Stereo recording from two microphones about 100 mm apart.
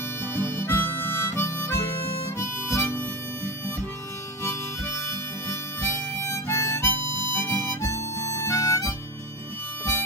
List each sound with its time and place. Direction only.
0.2 s harmonica: 25° left (ahead or behind)
4.4 s harmonica: 25° left (ahead or behind)